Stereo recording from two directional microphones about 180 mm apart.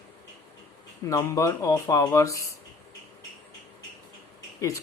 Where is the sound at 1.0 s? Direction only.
20° left (ahead or behind).